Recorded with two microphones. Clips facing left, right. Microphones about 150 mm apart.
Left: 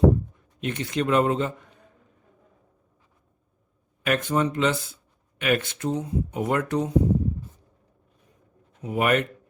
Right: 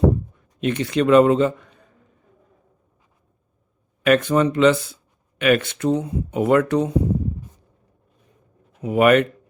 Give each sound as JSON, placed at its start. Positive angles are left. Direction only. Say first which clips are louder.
{"t": 0.6, "sound": "speech", "louder": "right 7 dB", "side_deg": -90}
{"t": 4.0, "sound": "speech", "louder": "right 7 dB", "side_deg": -80}
{"t": 8.8, "sound": "speech", "louder": "right 8 dB", "side_deg": -80}